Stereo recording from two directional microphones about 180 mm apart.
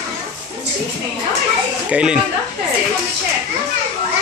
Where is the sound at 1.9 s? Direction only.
5° right (ahead or behind).